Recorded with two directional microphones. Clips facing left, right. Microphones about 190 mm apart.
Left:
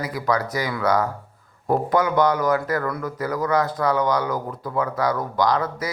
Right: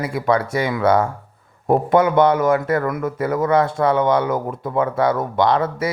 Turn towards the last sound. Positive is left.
turn(degrees=-25)  # may be behind; listen again after turning